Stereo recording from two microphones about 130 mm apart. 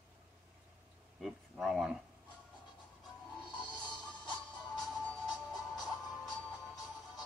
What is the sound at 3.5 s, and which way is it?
Music, 35° left (ahead or behind).